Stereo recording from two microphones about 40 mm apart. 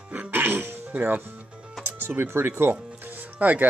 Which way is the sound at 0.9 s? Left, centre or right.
Right.